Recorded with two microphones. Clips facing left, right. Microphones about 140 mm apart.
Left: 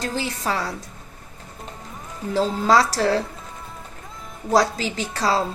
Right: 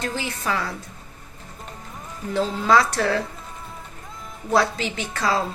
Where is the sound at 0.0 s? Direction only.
35° left (ahead or behind).